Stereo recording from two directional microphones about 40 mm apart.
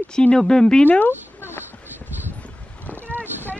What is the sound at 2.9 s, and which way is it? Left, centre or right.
Vehicle, right.